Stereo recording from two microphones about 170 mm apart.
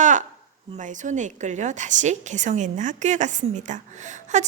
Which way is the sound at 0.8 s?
45° right (ahead or behind).